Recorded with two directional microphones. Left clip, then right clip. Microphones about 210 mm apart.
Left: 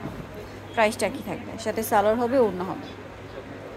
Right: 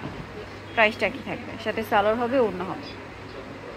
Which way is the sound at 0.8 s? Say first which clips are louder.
Right 1 dB; 20° left (ahead or behind).